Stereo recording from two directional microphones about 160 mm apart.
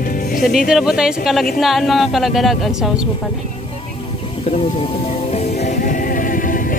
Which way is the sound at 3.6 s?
35° left (ahead or behind).